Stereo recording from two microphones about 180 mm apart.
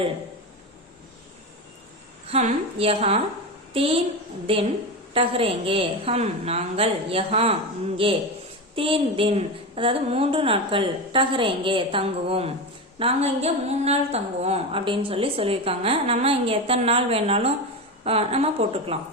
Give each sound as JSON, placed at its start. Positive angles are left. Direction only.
{"t": 2.2, "sound": "a woman's voice", "side_deg": -35}